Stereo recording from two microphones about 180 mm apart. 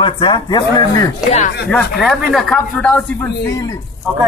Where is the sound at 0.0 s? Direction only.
25° left (ahead or behind).